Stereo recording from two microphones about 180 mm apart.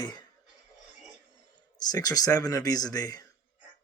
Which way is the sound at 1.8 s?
20° left (ahead or behind).